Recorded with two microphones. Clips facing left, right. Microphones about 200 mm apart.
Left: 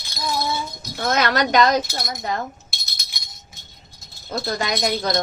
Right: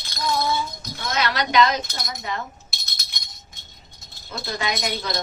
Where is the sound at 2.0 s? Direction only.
40° left (ahead or behind).